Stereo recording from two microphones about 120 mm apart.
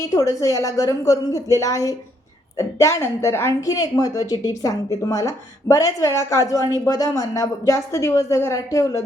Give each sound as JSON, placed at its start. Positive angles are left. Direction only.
{"t": 0.0, "sound": "a woman's voice", "side_deg": 30}